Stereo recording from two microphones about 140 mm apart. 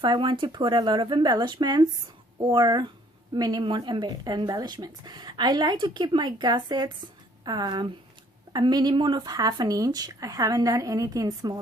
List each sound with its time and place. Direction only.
0.0 s speech: 35° right (ahead or behind)